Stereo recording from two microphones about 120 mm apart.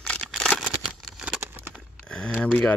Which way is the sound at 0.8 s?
5° right (ahead or behind).